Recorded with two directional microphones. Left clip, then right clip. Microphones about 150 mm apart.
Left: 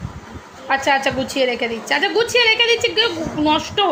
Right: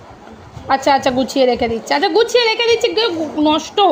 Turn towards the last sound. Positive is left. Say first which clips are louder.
# right 4 dB
turn(degrees=-50)  # may be behind; listen again after turning